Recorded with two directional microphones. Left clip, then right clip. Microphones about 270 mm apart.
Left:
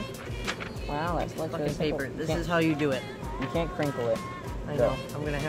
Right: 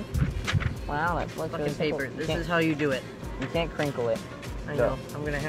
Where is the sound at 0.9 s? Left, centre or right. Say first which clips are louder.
Right 2 dB; right.